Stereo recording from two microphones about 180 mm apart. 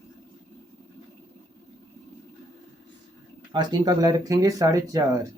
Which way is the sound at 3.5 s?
20° right (ahead or behind).